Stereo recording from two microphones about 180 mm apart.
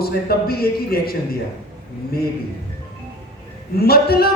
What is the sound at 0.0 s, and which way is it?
A man's voice, 60° left (ahead or behind).